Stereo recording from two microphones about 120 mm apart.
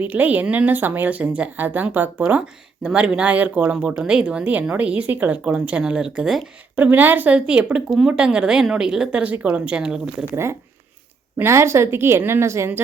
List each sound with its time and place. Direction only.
0.0 s speech: 15° right (ahead or behind)
11.3 s a woman's voice: 20° right (ahead or behind)